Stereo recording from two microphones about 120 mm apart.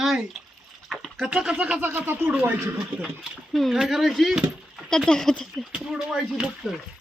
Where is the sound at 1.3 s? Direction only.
10° right (ahead or behind).